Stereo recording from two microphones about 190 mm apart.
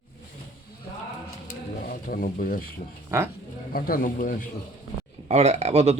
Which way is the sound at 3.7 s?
50° left (ahead or behind).